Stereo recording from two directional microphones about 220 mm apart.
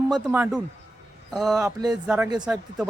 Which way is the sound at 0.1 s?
10° right (ahead or behind).